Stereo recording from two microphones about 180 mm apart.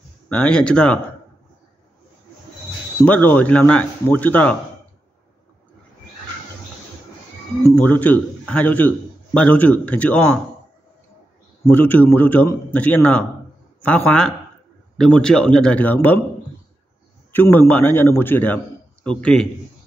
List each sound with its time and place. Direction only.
0.3 s a man's voice: 5° left (ahead or behind)
3.1 s a man's voice: 10° left (ahead or behind)
7.6 s a man's voice: 10° left (ahead or behind)
11.6 s a man's voice: 10° left (ahead or behind)
17.3 s a man's voice: 10° left (ahead or behind)